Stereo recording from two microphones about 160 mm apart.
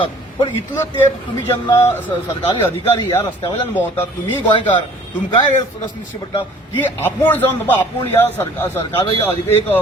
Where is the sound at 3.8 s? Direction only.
10° left (ahead or behind).